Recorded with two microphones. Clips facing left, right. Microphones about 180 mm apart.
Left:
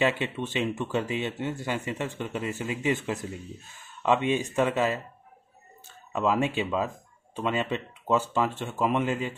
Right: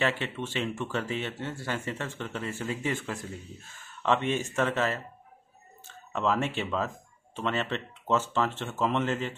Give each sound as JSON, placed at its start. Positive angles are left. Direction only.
{"t": 0.0, "sound": "speech", "side_deg": 15}
{"t": 6.1, "sound": "speech", "side_deg": 15}